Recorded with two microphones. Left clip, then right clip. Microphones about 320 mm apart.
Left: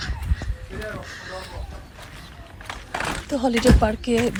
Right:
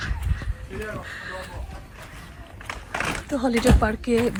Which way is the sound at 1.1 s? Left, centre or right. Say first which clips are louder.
Right 1 dB; centre.